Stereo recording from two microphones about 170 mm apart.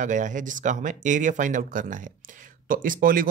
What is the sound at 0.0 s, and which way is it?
Speech, 45° right (ahead or behind).